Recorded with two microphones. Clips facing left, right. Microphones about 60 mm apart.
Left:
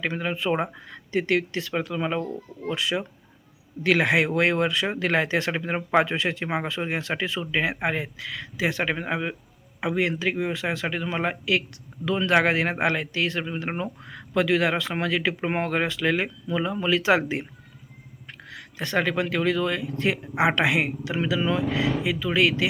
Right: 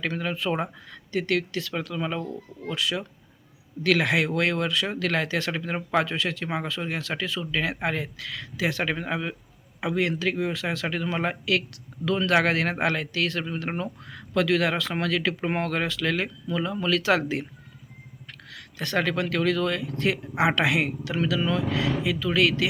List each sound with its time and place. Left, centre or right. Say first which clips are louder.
0.0 s a man's voice: left 1 dB; centre
7.5 s a man's voice: left 2 dB; centre
18.5 s a man's voice: left 1 dB; centre